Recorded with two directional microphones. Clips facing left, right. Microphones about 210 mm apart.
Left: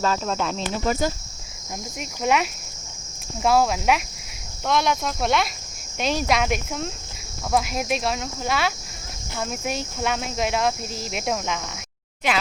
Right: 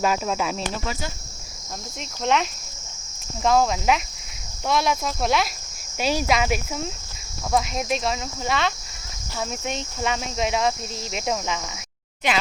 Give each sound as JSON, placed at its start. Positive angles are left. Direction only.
{"t": 0.0, "sound": "speech", "side_deg": -10}
{"t": 0.9, "sound": "speech", "side_deg": 45}
{"t": 2.0, "sound": "cricket", "side_deg": 5}
{"t": 3.4, "sound": "speech", "side_deg": 5}